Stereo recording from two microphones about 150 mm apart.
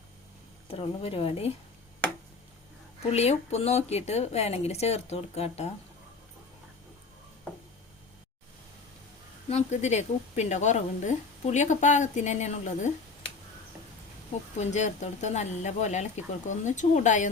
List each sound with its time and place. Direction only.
0.7 s a woman's voice: 40° left (ahead or behind)
3.1 s speech: 45° left (ahead or behind)
9.5 s speech: 50° left (ahead or behind)
14.6 s speech: 50° left (ahead or behind)